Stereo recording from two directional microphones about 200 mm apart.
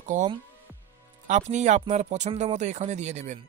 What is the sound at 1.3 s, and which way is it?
Speech, 35° right (ahead or behind).